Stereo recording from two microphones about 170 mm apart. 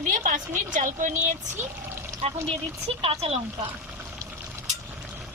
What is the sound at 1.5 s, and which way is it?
Pour, 15° right (ahead or behind).